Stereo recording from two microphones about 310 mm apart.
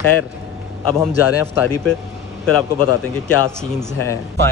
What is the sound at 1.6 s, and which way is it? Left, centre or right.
Speech, centre.